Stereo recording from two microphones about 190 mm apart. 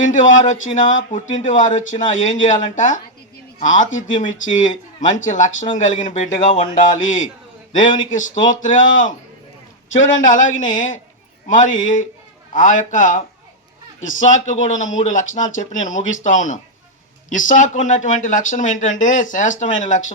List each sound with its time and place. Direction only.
0.0 s speech: 40° left (ahead or behind)
10.2 s speech: 45° left (ahead or behind)